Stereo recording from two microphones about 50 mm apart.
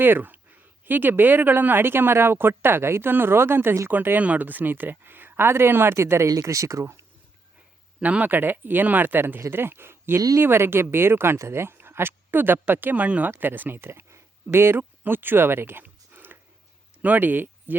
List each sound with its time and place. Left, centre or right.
0.0 s speech: right
4.2 s speech: right
8.0 s speech: right
14.1 s a sound: right
15.0 s speech: right
15.8 s a sound: right
17.0 s speech: right